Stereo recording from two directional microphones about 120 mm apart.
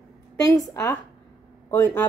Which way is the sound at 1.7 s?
15° left (ahead or behind).